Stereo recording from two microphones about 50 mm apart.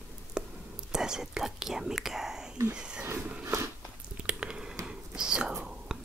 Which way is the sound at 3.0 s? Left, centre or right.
Right.